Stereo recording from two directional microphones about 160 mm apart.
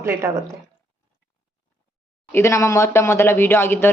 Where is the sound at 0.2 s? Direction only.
15° right (ahead or behind).